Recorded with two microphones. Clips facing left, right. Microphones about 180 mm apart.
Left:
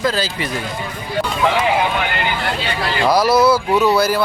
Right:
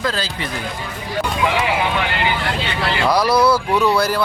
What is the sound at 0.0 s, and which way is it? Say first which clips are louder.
Speech: left 3 dB; 5° left (ahead or behind).